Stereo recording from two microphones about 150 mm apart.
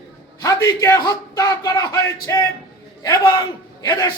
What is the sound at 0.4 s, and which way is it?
Speech, 25° left (ahead or behind).